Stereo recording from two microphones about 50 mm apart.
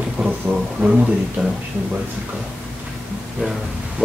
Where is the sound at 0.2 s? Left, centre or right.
Right.